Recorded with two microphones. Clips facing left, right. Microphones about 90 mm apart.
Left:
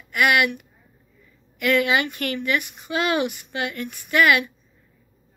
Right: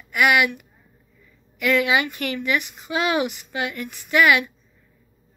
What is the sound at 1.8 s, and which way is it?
Speech, 15° right (ahead or behind).